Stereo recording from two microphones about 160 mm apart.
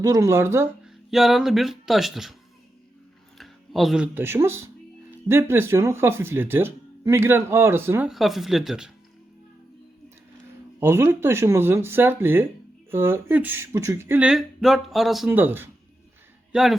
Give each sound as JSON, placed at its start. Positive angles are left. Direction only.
{"t": 0.0, "sound": "speech", "side_deg": -20}
{"t": 0.9, "sound": "speech", "side_deg": 0}
{"t": 3.3, "sound": "speech", "side_deg": 0}
{"t": 8.1, "sound": "speech", "side_deg": 0}
{"t": 10.8, "sound": "speech", "side_deg": -15}
{"t": 15.3, "sound": "speech", "side_deg": -10}
{"t": 16.5, "sound": "speech", "side_deg": 0}